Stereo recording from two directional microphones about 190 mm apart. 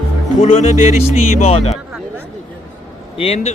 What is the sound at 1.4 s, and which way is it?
Speech, 30° left (ahead or behind).